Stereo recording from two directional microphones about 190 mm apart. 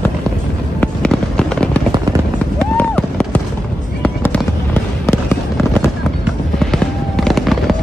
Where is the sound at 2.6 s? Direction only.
5° left (ahead or behind).